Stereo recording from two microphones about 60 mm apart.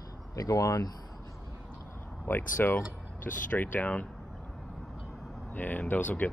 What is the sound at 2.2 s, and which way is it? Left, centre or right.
Speech, left.